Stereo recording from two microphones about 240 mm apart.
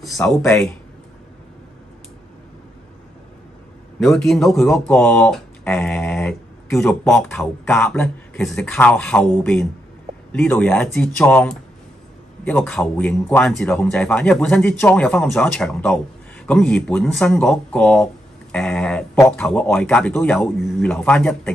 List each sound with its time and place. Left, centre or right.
0.0 s speech: centre
4.0 s speech: centre